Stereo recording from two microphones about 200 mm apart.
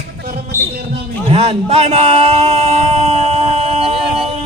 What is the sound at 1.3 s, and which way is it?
A man's voice, 30° right (ahead or behind).